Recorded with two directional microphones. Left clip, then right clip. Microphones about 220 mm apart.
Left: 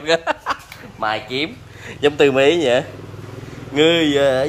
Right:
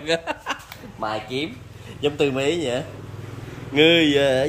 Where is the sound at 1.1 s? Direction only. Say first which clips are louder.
Left 5 dB; 5° left (ahead or behind).